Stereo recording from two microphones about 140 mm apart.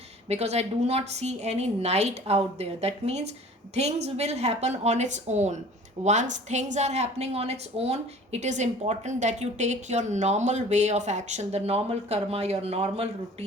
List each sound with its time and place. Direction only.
0.3 s a woman's voice: 50° right (ahead or behind)